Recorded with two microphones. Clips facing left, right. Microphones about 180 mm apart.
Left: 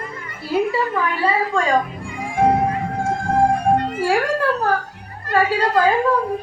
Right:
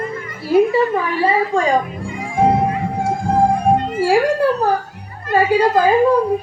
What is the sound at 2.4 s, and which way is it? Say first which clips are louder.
Music: right 2 dB; 20° right (ahead or behind).